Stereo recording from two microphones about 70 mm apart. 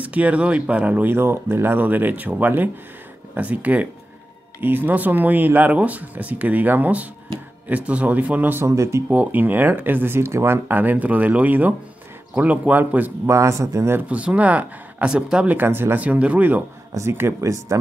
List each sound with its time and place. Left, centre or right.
0.0 s speech: right
1.1 s speech: right
8.6 s speech: right
9.1 s speech: right
13.3 s speech: right
14.0 s speech: centre
16.9 s speech: right
17.4 s speech: right